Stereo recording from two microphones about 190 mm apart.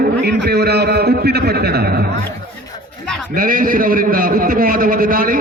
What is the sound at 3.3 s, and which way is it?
A man's voice, 45° right (ahead or behind).